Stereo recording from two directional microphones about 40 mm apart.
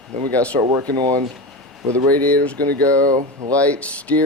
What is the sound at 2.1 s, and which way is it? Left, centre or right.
Speech, left.